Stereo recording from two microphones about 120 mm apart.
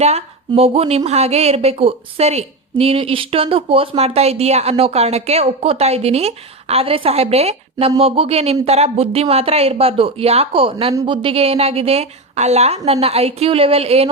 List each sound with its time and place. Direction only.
0.0 s a woman's voice: 60° right (ahead or behind)